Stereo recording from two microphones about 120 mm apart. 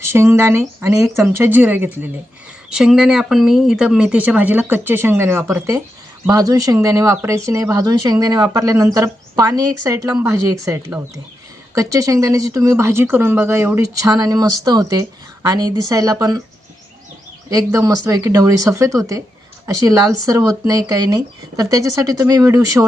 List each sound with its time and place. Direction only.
0.0 s speech: 20° right (ahead or behind)
2.7 s speech: 5° right (ahead or behind); by 16.4 s 30° right (ahead or behind)
17.5 s speech: 30° right (ahead or behind)